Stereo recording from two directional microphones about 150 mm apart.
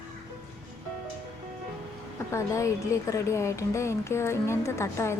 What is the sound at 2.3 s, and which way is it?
A woman's voice, 20° left (ahead or behind).